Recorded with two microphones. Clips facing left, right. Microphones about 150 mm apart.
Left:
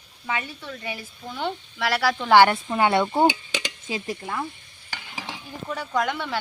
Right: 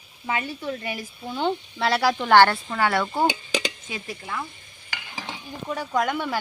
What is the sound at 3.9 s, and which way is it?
Stir, 35° left (ahead or behind).